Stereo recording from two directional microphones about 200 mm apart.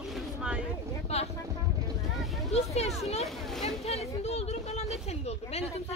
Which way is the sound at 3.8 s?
30° left (ahead or behind).